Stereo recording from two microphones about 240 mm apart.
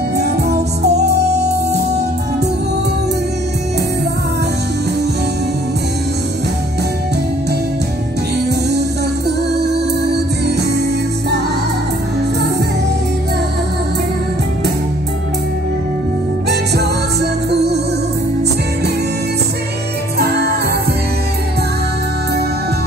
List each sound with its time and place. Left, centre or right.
0.1 s music: right
8.5 s music: right
16.4 s music: right